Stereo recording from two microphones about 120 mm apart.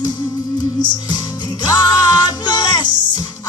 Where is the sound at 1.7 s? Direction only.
35° left (ahead or behind).